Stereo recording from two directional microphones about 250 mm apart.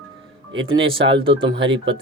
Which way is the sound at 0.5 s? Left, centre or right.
Right.